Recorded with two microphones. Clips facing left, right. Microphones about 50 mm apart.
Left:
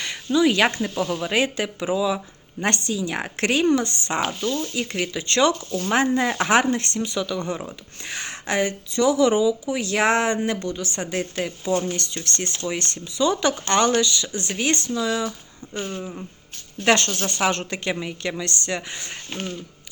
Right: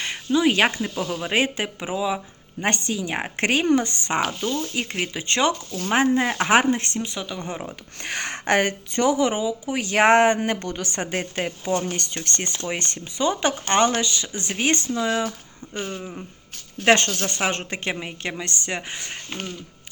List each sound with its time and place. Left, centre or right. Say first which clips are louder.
0.0 s a sound: left 1 dB; right
1.2 s speech: right 2 dB; right
2.1 s speech: even; centre
2.8 s speech: even; right
8.0 s speech: right 4 dB; right
9.0 s speech: left 3 dB; right
9.7 s a woman's voice: right 8 dB; right
10.9 s a woman's voice: even; right
15.8 s speech: left 1 dB; right